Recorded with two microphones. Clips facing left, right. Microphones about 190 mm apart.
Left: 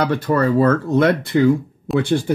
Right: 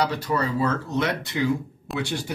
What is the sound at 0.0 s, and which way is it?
Speech, 55° left (ahead or behind).